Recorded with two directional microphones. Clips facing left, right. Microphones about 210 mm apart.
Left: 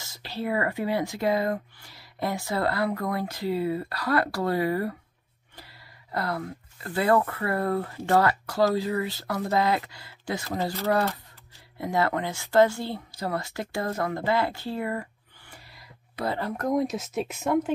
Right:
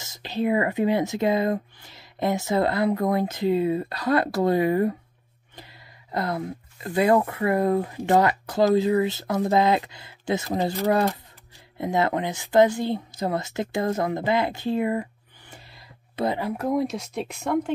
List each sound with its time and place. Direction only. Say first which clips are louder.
0.0 s speech: right 6 dB; 20° right (ahead or behind)
15.5 s a sound: right 2 dB; 25° right (ahead or behind)
16.3 s speech: left 3 dB; 10° right (ahead or behind)